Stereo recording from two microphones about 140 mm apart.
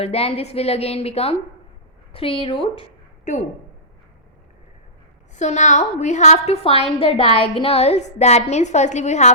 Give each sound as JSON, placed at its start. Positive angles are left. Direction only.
{"t": 0.0, "sound": "a woman's voice", "side_deg": 45}
{"t": 3.3, "sound": "a woman's voice", "side_deg": 60}
{"t": 5.4, "sound": "a woman's voice", "side_deg": 55}